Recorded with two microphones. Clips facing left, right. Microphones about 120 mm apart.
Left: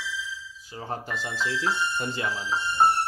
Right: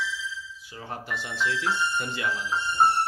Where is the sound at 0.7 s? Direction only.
35° left (ahead or behind).